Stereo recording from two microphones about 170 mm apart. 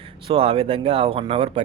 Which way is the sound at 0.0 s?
35° right (ahead or behind).